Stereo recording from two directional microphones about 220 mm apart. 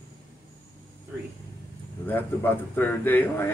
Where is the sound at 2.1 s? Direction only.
10° left (ahead or behind).